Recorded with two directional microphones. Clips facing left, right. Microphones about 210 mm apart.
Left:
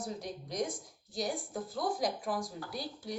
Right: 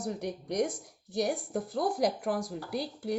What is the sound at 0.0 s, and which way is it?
Speech, 65° right (ahead or behind).